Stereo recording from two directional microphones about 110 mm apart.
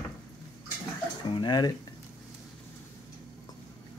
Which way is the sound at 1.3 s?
40° left (ahead or behind).